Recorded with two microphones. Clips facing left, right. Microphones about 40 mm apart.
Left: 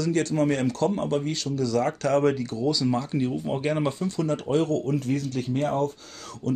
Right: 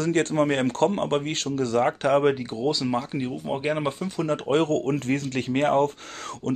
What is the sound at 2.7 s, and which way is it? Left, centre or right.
Speech, right.